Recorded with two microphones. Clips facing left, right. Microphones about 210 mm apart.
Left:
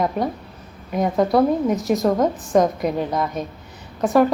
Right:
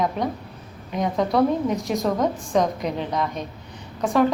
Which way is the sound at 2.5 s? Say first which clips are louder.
Left 6 dB; 45° left (ahead or behind).